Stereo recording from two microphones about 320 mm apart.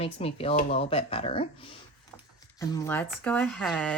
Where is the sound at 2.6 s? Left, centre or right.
Centre.